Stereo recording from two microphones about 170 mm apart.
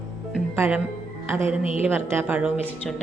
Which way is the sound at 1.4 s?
35° left (ahead or behind).